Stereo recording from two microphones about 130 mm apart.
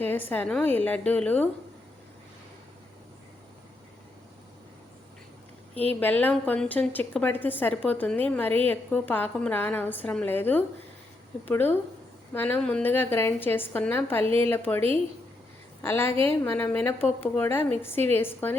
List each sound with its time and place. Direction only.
0.0 s a woman's voice: 15° left (ahead or behind)
5.9 s a woman's voice: 15° left (ahead or behind)